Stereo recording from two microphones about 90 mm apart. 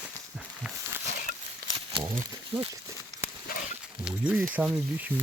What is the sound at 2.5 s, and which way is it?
Speech, 90° right.